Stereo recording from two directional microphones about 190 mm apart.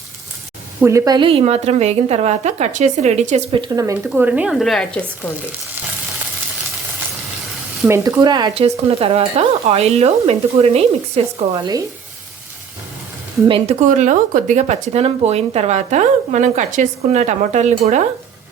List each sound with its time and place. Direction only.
0.8 s speech: 15° right (ahead or behind)
4.1 s speech: 10° right (ahead or behind)
7.9 s speech: 15° right (ahead or behind)
13.5 s speech: 35° right (ahead or behind)